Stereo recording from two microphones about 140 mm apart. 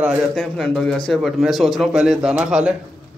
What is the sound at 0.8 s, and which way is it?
Speech, 5° left (ahead or behind).